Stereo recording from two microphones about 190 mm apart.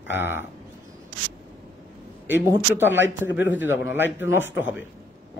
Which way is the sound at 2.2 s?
10° right (ahead or behind).